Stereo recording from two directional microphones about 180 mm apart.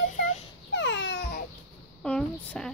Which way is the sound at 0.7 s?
85° left.